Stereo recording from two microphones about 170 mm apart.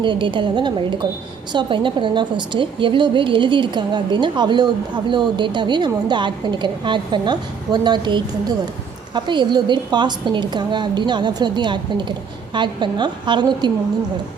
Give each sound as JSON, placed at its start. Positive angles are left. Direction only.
{"t": 0.0, "sound": "a woman's voice", "side_deg": -30}